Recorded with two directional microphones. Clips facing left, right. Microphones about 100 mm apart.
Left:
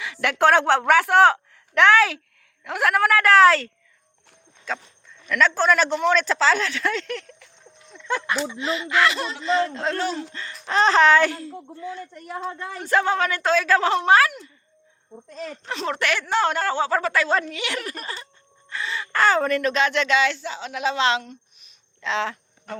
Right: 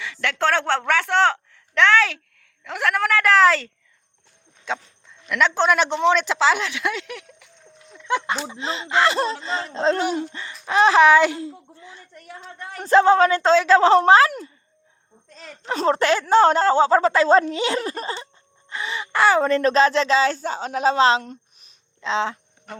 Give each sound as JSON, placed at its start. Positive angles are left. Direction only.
{"t": 0.0, "sound": "a woman's voice", "side_deg": 10}
{"t": 4.6, "sound": "speech", "side_deg": -20}
{"t": 7.9, "sound": "a sound", "side_deg": -15}
{"t": 8.4, "sound": "speech", "side_deg": -30}
{"t": 15.6, "sound": "speech", "side_deg": -35}
{"t": 22.0, "sound": "speech", "side_deg": -25}